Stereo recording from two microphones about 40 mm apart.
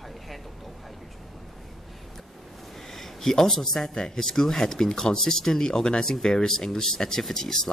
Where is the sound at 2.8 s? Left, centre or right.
Centre.